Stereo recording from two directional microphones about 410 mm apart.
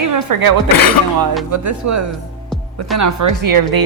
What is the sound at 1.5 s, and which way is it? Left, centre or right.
Speech, right.